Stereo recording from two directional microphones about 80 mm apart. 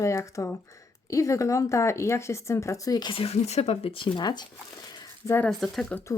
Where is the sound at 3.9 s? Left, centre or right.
Left.